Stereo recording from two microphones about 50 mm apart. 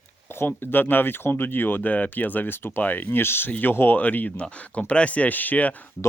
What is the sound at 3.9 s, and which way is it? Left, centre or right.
Speech, left.